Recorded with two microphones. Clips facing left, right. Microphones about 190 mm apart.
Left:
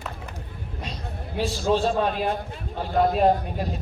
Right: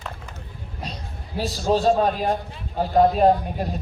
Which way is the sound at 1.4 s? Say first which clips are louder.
Right 2 dB; 40° right (ahead or behind).